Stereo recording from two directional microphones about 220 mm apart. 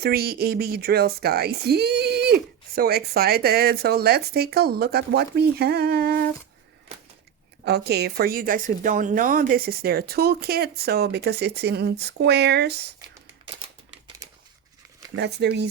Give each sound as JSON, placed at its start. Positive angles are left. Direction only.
{"t": 0.0, "sound": "speech", "side_deg": -45}
{"t": 7.6, "sound": "speech", "side_deg": -50}
{"t": 14.2, "sound": "bird", "side_deg": -15}
{"t": 15.1, "sound": "speech", "side_deg": -50}